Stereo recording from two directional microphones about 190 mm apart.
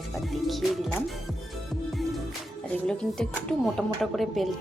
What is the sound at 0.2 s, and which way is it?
Speech, centre (ahead or behind).